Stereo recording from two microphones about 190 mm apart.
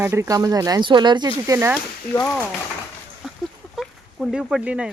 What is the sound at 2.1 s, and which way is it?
Speech, 25° left (ahead or behind).